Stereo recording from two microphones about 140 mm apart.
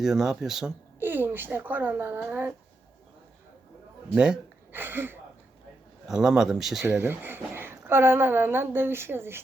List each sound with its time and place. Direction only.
0.0 s speech: 5° right (ahead or behind)
0.9 s speech: 15° right (ahead or behind)
4.1 s speech: 5° right (ahead or behind)
6.1 s speech: 5° right (ahead or behind)
6.8 s a woman's voice: 15° right (ahead or behind)